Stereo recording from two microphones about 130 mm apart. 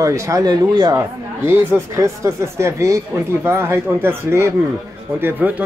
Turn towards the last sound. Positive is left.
turn(degrees=-15)  # may be behind; listen again after turning